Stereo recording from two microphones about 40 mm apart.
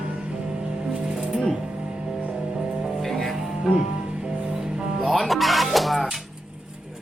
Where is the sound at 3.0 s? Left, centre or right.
Centre.